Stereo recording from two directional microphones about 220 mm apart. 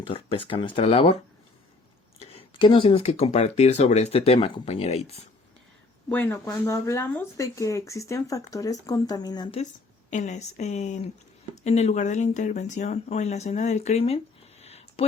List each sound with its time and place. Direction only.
0.1 s speech: 25° left (ahead or behind)
2.3 s speech: 25° left (ahead or behind)
6.1 s speech: 10° left (ahead or behind)
10.1 s speech: 35° left (ahead or behind)
14.6 s a sound: 30° left (ahead or behind)